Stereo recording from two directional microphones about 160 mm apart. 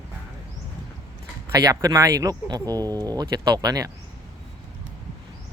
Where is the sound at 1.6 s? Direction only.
25° right (ahead or behind).